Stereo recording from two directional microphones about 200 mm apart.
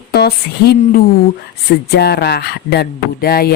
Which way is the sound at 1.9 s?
55° left (ahead or behind).